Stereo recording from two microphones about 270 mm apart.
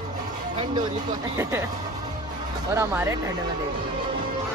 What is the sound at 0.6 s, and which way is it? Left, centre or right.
Speech, centre.